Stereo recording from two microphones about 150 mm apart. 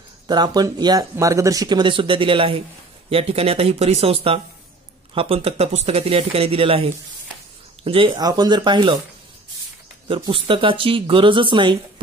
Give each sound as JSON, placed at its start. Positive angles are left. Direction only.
{"t": 0.3, "sound": "speech", "side_deg": -25}
{"t": 10.0, "sound": "speech", "side_deg": -35}